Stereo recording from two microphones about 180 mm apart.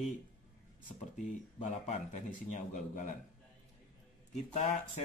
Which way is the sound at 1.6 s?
45° left (ahead or behind).